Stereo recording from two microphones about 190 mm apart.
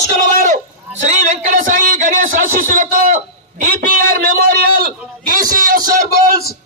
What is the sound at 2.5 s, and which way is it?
A man's voice, 45° right (ahead or behind).